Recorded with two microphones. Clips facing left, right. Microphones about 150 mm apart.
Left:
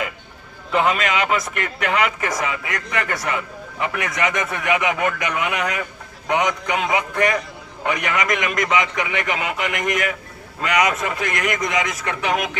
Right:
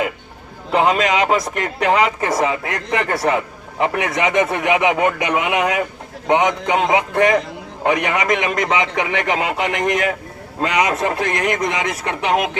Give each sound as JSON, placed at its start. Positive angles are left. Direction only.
{"t": 0.7, "sound": "speech", "side_deg": -35}